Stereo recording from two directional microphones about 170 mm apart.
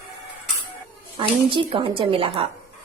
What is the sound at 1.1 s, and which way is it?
Speech, 30° right (ahead or behind).